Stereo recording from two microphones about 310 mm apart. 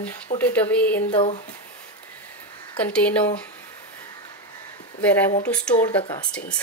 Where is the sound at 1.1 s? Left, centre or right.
Centre.